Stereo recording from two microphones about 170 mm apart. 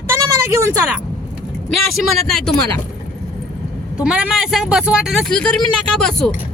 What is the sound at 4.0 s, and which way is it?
Speech, 5° right (ahead or behind).